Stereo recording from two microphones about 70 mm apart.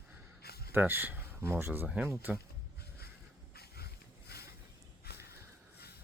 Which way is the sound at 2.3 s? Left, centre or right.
Right.